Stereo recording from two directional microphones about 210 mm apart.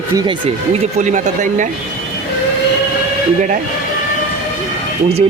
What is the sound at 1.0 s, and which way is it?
Speech, 35° right (ahead or behind).